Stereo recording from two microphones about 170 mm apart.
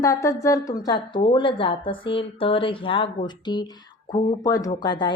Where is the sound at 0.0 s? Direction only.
20° left (ahead or behind).